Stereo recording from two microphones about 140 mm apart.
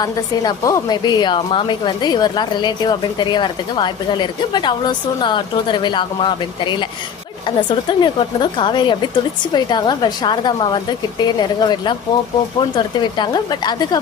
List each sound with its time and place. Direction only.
0.0 s a woman's voice: 25° left (ahead or behind)